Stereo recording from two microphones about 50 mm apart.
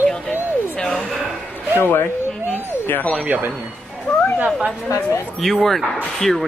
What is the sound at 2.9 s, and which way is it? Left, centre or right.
Speech, left.